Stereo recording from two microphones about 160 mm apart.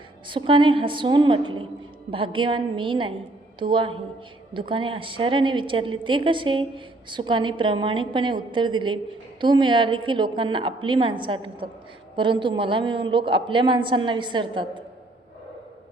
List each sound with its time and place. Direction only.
0.3 s a woman's voice: 30° right (ahead or behind)